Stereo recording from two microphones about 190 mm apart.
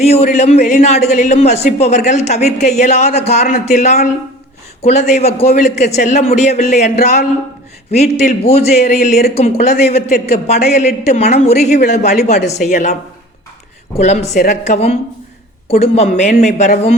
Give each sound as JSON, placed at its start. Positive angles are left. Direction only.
{"t": 0.0, "sound": "a man's voice", "side_deg": 35}
{"t": 16.0, "sound": "a man's voice", "side_deg": 35}